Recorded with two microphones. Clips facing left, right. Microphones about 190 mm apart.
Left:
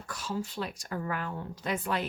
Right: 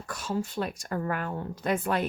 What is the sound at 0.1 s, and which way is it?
Speech, 50° right (ahead or behind).